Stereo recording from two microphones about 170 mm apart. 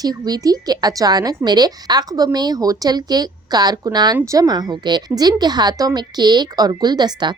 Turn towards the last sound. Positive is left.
turn(degrees=-25)  # may be behind; listen again after turning